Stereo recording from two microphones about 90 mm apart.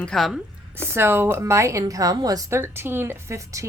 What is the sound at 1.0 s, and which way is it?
A woman's voice, 25° right (ahead or behind).